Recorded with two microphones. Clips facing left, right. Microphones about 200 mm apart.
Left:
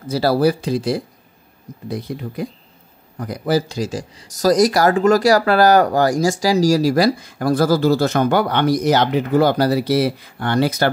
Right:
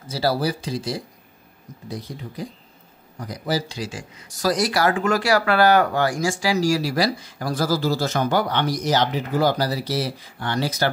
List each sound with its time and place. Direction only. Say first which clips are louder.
0.1 s speech: left 7 dB; 60° left (ahead or behind)